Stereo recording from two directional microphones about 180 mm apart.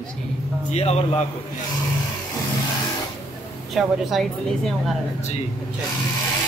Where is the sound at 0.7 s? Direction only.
35° left (ahead or behind).